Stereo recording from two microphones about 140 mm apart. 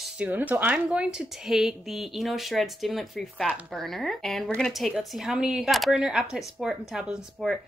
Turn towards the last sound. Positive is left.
turn(degrees=-5)  # may be behind; listen again after turning